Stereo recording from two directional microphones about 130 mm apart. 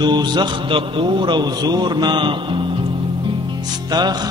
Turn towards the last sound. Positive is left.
turn(degrees=-30)  # may be behind; listen again after turning